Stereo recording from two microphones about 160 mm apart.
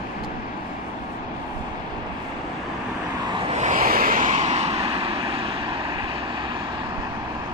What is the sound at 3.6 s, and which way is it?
Vehicle, 55° right (ahead or behind).